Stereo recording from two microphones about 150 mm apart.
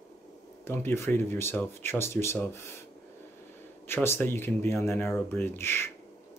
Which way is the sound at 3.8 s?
15° left (ahead or behind).